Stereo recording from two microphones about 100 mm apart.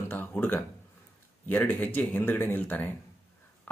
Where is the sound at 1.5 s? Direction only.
20° left (ahead or behind).